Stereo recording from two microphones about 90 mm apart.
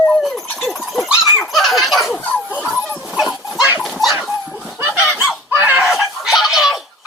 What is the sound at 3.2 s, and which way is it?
Dog, 45° left (ahead or behind).